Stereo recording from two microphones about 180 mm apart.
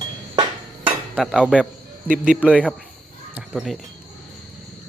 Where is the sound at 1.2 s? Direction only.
Centre (ahead or behind).